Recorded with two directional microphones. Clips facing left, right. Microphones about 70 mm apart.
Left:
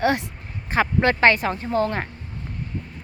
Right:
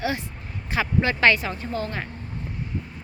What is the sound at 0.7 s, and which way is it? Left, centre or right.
A woman's voice, left.